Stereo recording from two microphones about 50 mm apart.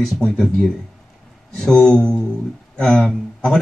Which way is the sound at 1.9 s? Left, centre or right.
Centre.